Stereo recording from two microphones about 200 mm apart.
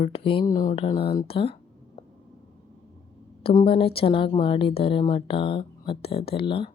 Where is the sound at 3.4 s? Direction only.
25° left (ahead or behind).